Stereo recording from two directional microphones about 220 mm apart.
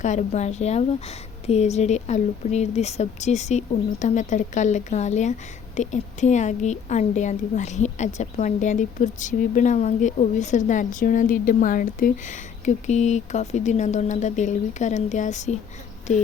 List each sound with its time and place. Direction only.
0.0 s a woman's voice: 35° left (ahead or behind)